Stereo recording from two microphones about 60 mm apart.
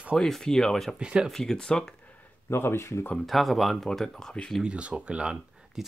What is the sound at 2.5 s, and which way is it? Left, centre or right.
Speech, left.